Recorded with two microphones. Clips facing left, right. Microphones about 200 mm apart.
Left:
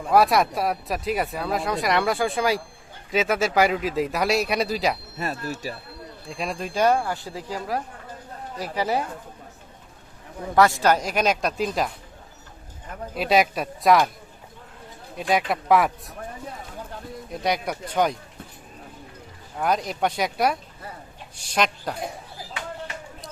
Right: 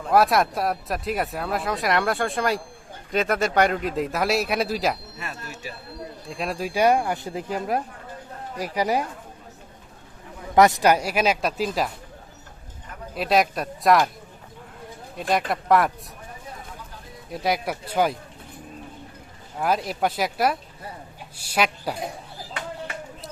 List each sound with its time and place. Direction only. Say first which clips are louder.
0.1 s speech: even; centre (ahead or behind)
5.1 s speech: left 7 dB; 40° left (ahead or behind)
6.2 s speech: right 1 dB; centre (ahead or behind)
10.5 s speech: right 2 dB; 20° right (ahead or behind); by 11.9 s centre (ahead or behind)
13.1 s speech: left 1 dB; centre (ahead or behind)
15.2 s speech: left 1 dB; centre (ahead or behind)
17.3 s speech: right 1 dB; 5° right (ahead or behind)
19.5 s speech: even; 5° right (ahead or behind)